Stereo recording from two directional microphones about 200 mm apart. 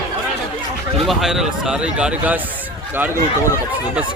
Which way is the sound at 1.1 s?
Centre (ahead or behind).